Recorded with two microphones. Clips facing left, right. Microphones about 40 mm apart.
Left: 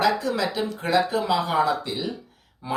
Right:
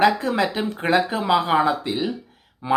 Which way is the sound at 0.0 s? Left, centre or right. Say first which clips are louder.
Right 4 dB; right.